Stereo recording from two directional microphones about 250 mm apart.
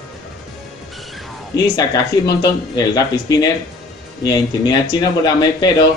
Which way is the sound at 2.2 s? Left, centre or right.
Centre.